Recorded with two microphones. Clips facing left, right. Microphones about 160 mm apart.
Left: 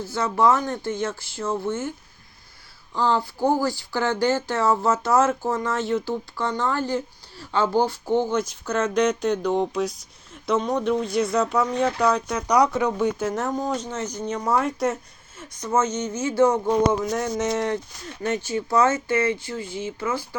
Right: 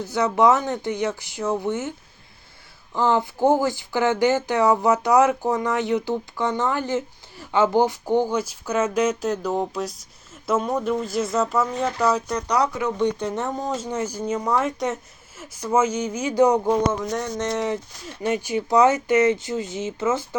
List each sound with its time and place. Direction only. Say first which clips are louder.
0.0 s speech: right 2 dB; 20° right (ahead or behind)
2.9 s speech: right 2 dB; 20° right (ahead or behind); by 12.4 s 5° right (ahead or behind)
12.4 s speech: left 3 dB; 15° left (ahead or behind)
13.7 s speech: right 2 dB; 10° right (ahead or behind)
17.0 s speech: left 2 dB; 5° left (ahead or behind)
18.2 s speech: right 2 dB; 10° right (ahead or behind)